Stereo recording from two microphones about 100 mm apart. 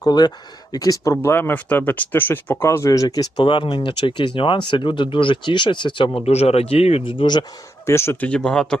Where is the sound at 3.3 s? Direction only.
55° left (ahead or behind).